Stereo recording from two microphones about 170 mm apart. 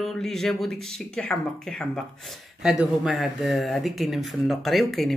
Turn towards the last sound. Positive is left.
turn(degrees=0)  # may be behind; listen again after turning